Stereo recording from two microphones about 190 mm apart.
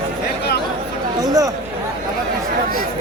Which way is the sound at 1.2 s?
20° right (ahead or behind).